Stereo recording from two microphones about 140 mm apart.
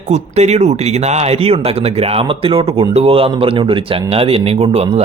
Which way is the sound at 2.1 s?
40° right (ahead or behind).